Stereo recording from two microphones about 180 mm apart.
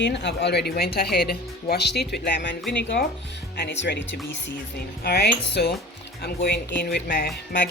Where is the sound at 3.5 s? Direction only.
75° left (ahead or behind).